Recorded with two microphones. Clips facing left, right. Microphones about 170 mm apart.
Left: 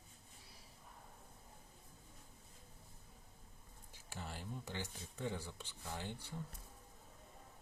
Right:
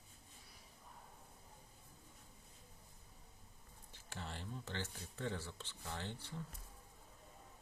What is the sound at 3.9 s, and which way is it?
Speech, 10° left (ahead or behind).